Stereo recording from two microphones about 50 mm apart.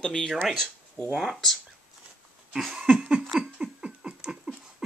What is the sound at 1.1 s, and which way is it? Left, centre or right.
Speech, centre.